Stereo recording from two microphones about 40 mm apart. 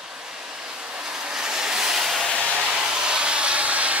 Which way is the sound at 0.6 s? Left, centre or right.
Centre.